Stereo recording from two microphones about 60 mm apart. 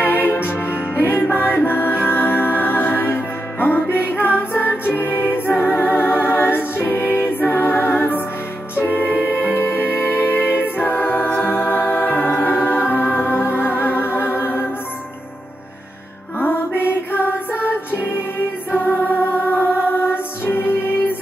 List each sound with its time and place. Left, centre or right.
0.0 s music: left
7.4 s a capella: left
8.7 s music: left
16.3 s music: left
19.0 s music: left